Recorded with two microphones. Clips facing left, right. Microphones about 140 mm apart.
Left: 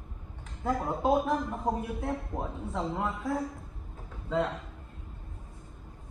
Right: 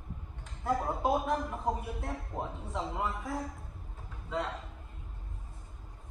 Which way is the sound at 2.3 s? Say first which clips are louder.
Left 3 dB; 10° left (ahead or behind).